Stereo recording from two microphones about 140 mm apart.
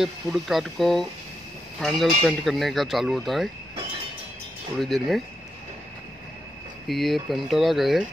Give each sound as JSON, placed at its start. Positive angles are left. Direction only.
{"t": 0.0, "sound": "speech", "side_deg": 0}
{"t": 4.7, "sound": "speech", "side_deg": 0}
{"t": 6.9, "sound": "speech", "side_deg": 0}